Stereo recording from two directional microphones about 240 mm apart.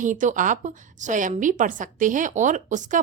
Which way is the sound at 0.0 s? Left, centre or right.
Right.